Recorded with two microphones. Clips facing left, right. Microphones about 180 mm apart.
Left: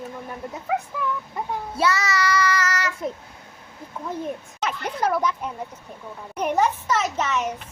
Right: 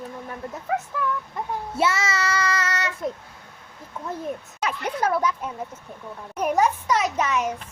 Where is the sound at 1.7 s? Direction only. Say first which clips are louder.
Left 1 dB; 25° right (ahead or behind).